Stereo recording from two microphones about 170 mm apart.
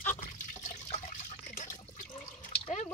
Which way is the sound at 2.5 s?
35° left (ahead or behind).